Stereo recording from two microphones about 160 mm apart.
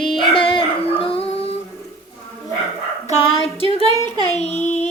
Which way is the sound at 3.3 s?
35° left (ahead or behind).